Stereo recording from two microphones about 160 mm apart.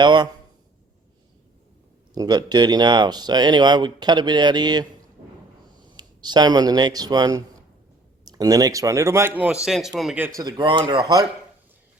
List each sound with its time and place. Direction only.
0.0 s speech: 30° right (ahead or behind)
2.1 s speech: 25° right (ahead or behind); by 10.2 s centre (ahead or behind)
10.2 s speech: 15° right (ahead or behind)
10.4 s speech: 30° right (ahead or behind)